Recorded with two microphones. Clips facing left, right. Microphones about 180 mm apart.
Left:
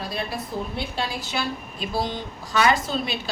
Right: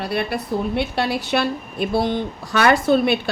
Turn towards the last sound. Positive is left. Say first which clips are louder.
# right 8 dB
turn(degrees=-60)  # may be behind; listen again after turning